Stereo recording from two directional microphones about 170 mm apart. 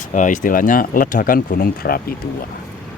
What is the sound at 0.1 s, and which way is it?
Speech, 45° left (ahead or behind).